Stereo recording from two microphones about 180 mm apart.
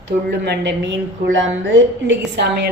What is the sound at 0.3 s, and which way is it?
A woman's voice, 65° right (ahead or behind).